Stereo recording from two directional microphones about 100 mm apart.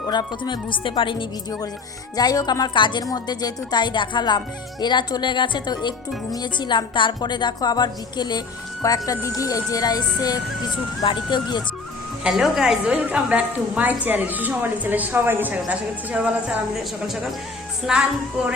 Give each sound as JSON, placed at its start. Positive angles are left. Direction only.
{"t": 0.1, "sound": "speech", "side_deg": 45}
{"t": 2.1, "sound": "speech", "side_deg": 40}
{"t": 3.0, "sound": "a woman's voice", "side_deg": 40}
{"t": 11.0, "sound": "speech", "side_deg": 50}
{"t": 12.2, "sound": "a woman's voice", "side_deg": -5}
{"t": 17.9, "sound": "speech", "side_deg": -5}